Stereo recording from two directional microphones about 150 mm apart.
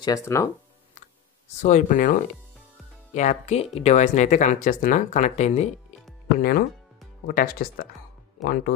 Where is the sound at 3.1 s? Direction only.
50° left (ahead or behind).